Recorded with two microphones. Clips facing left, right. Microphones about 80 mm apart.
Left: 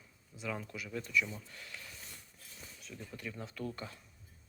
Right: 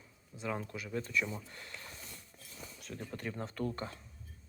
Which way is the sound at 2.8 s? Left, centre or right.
Right.